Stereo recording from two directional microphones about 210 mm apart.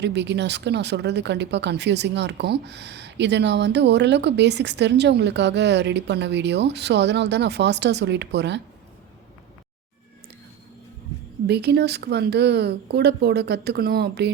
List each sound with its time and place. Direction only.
0.0 s speech: 55° right (ahead or behind)
11.4 s speech: 50° right (ahead or behind)